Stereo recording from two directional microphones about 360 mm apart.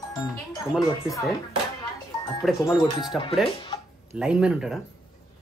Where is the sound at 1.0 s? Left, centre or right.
Centre.